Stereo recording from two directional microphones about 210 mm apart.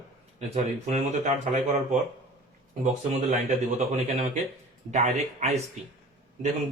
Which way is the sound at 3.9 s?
30° right (ahead or behind).